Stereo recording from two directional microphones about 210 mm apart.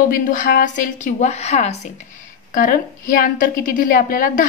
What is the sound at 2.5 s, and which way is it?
A woman's voice, 40° left (ahead or behind).